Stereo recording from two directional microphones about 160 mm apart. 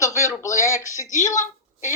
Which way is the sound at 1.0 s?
50° left (ahead or behind).